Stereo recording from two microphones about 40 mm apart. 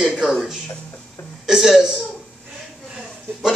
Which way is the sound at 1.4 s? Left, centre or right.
Centre.